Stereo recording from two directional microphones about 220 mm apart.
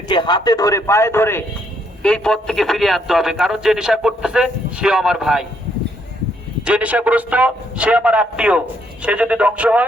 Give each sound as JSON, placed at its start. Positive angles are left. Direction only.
{"t": 0.1, "sound": "a man's voice", "side_deg": 20}
{"t": 6.6, "sound": "a man's voice", "side_deg": -5}